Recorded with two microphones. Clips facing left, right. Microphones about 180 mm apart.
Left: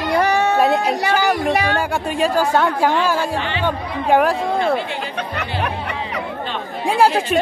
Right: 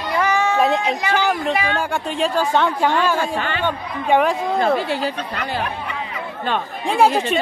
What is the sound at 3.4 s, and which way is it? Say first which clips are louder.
Speech: even; 45° right (ahead or behind).